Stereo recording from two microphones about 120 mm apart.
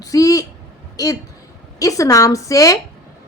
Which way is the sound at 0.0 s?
30° left (ahead or behind).